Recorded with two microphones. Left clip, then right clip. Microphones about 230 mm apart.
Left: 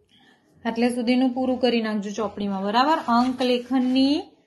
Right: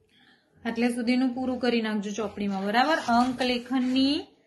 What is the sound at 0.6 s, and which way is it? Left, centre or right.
A woman's voice, centre.